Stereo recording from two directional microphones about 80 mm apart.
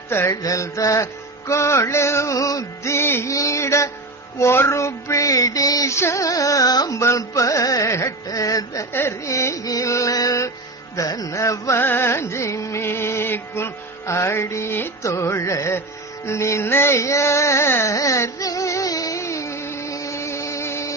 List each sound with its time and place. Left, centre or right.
0.1 s music: left
0.4 s music: left
8.9 s music: left
11.8 s music: left
15.0 s music: left
17.9 s music: left